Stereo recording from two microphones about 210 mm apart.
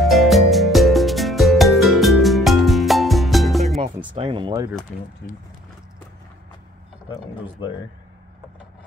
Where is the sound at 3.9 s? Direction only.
25° right (ahead or behind).